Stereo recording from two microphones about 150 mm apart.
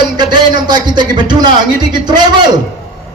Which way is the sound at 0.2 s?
30° right (ahead or behind).